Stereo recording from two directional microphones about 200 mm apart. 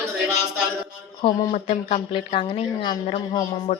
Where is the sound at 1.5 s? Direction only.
35° left (ahead or behind).